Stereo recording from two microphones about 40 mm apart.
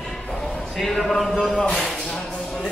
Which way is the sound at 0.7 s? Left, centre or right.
Centre.